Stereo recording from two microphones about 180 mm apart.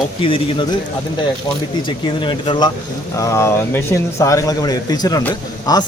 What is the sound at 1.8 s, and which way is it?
A man's voice, 25° left (ahead or behind).